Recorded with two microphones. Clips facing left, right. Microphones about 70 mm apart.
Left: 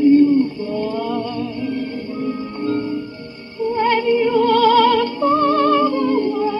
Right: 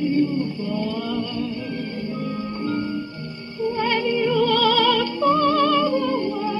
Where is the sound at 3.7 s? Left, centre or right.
Left.